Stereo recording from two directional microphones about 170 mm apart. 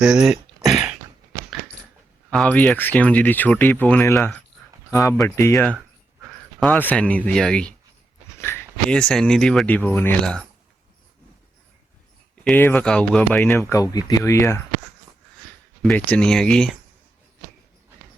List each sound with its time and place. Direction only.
0.0 s a sound: 5° right (ahead or behind)
2.3 s speech: 5° left (ahead or behind)
4.9 s speech: 15° left (ahead or behind)
6.2 s speech: centre (ahead or behind)
12.5 s speech: 10° left (ahead or behind)
13.6 s speech: 20° left (ahead or behind)
15.8 s speech: 5° left (ahead or behind)